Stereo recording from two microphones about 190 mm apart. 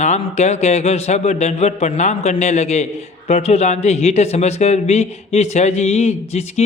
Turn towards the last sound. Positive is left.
turn(degrees=35)  # may be behind; listen again after turning